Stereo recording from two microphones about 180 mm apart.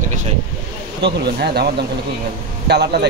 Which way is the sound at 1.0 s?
60° right (ahead or behind).